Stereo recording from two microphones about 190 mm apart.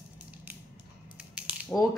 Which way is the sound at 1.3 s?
5° right (ahead or behind).